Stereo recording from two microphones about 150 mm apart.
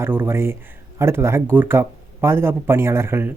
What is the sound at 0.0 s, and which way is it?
Speech, 15° right (ahead or behind).